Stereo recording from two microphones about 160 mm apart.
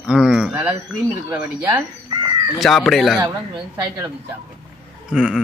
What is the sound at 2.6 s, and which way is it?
Speech, centre (ahead or behind).